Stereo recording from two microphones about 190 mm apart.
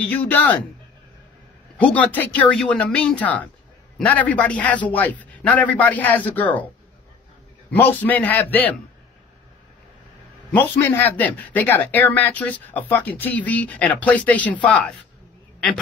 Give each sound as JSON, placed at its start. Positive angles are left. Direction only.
{"t": 0.0, "sound": "speech", "side_deg": 10}
{"t": 1.8, "sound": "speech", "side_deg": 5}
{"t": 7.7, "sound": "speech", "side_deg": 10}
{"t": 10.5, "sound": "speech", "side_deg": 10}